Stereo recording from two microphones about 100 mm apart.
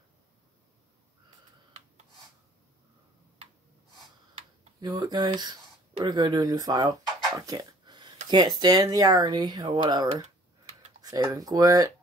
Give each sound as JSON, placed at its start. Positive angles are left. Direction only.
{"t": 4.7, "sound": "speech", "side_deg": -45}
{"t": 11.2, "sound": "speech", "side_deg": -40}